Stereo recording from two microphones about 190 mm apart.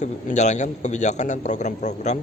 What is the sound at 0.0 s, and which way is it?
A man's voice, 40° left (ahead or behind).